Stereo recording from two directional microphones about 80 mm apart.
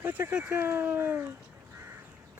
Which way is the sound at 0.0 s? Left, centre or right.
Right.